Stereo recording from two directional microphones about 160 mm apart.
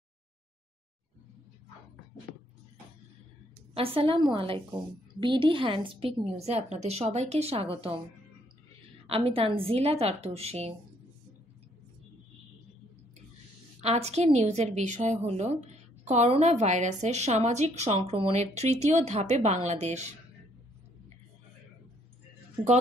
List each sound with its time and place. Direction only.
3.7 s a woman's voice: 35° right (ahead or behind)
9.0 s a woman's voice: 35° right (ahead or behind)
13.7 s a woman's voice: 40° right (ahead or behind)